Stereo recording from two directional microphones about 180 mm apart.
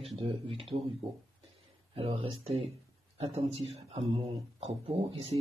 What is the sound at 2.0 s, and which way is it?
Speech, 30° right (ahead or behind).